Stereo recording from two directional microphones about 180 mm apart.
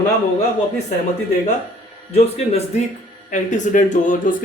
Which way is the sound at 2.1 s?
35° left (ahead or behind).